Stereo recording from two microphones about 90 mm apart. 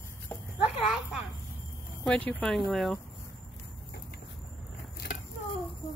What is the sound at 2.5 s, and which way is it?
Speech, centre (ahead or behind).